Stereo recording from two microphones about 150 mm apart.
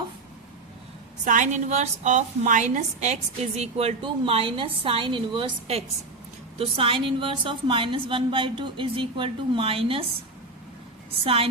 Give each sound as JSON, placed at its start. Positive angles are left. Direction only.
{"t": 1.2, "sound": "a woman's voice", "side_deg": -55}
{"t": 11.1, "sound": "a woman's voice", "side_deg": -40}